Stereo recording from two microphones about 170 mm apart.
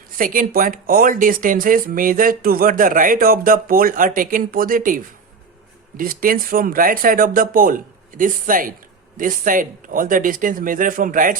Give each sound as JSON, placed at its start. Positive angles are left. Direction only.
{"t": 0.2, "sound": "speech", "side_deg": -55}